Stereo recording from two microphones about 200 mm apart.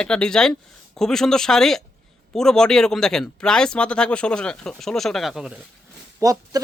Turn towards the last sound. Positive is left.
turn(degrees=-15)  # may be behind; listen again after turning